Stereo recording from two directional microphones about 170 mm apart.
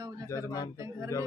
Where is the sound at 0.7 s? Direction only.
15° right (ahead or behind).